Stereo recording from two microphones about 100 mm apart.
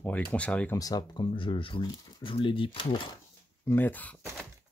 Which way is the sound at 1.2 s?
60° left (ahead or behind).